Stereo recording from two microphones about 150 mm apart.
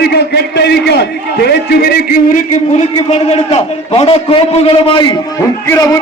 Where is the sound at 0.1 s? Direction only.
90° left.